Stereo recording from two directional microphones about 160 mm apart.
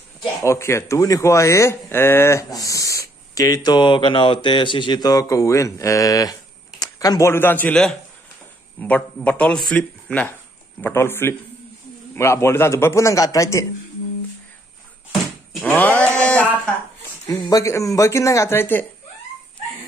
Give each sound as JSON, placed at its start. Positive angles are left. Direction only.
{"t": 0.2, "sound": "a man's voice", "side_deg": 20}
{"t": 15.6, "sound": "a sound", "side_deg": 10}
{"t": 17.5, "sound": "a man's voice", "side_deg": 20}